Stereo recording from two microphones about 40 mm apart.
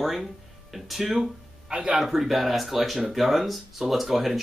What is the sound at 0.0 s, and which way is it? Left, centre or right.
Speech, centre.